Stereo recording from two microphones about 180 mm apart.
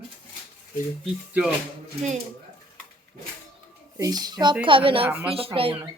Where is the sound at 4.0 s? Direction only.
20° right (ahead or behind).